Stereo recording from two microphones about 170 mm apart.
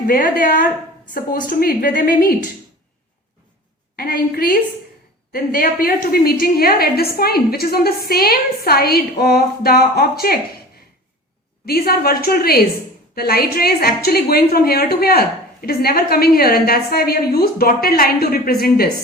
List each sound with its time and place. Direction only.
0.1 s a woman's voice: 60° left (ahead or behind)
3.9 s a woman's voice: 60° left (ahead or behind)
11.6 s a woman's voice: 60° left (ahead or behind)